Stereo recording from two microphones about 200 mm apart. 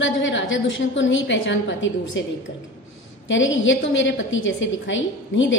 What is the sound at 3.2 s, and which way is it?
A woman's voice, 70° left (ahead or behind).